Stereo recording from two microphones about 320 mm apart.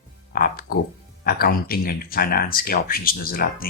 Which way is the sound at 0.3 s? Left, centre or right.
Left.